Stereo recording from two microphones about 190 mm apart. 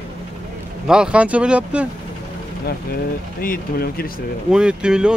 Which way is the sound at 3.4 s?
50° left (ahead or behind).